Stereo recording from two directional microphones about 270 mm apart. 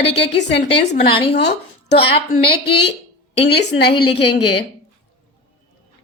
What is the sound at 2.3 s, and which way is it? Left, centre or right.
Speech, left.